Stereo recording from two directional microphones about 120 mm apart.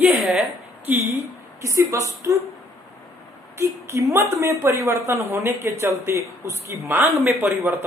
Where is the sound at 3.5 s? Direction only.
20° right (ahead or behind).